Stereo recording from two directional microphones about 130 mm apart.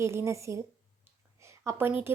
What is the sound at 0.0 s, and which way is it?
A woman's voice, 20° right (ahead or behind).